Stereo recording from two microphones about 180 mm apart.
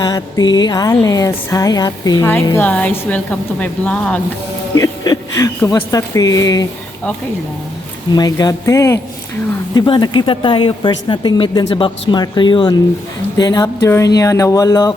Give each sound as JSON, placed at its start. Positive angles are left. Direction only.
{"t": 0.0, "sound": "a woman's voice", "side_deg": 20}
{"t": 4.7, "sound": "speech", "side_deg": 20}
{"t": 8.1, "sound": "speech", "side_deg": 20}